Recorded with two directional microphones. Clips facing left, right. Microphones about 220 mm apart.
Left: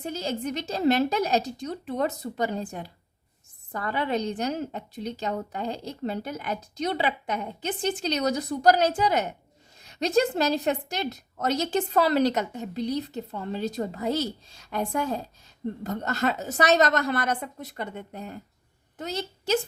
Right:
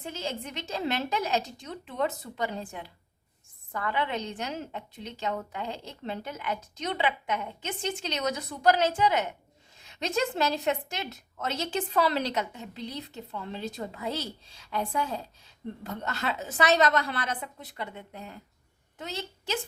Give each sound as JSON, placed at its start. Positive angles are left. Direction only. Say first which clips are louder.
{"t": 0.0, "sound": "a woman's voice", "louder": "left 6 dB", "side_deg": 40}